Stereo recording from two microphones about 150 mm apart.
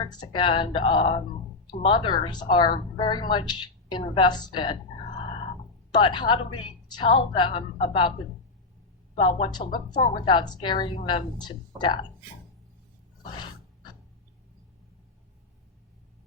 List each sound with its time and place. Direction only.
0.0 s a woman's voice: 30° left (ahead or behind)
5.9 s a woman's voice: 30° left (ahead or behind)
9.1 s a woman's voice: 40° left (ahead or behind)